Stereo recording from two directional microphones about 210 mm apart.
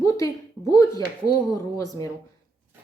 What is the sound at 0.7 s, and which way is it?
A woman's voice, 15° left (ahead or behind).